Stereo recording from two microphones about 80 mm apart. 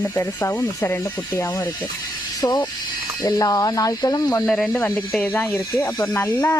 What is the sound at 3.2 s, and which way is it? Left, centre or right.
Speech, left.